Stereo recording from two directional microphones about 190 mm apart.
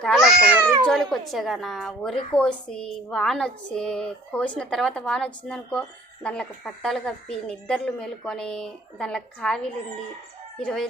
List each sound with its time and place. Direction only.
0.0 s cat: centre (ahead or behind)
0.9 s a woman's voice: centre (ahead or behind)
10.6 s a woman's voice: 5° left (ahead or behind)